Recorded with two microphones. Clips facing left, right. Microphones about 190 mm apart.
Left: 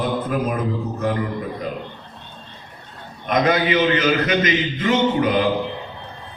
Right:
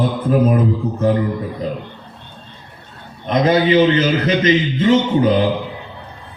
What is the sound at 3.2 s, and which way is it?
A man's voice, 30° right (ahead or behind).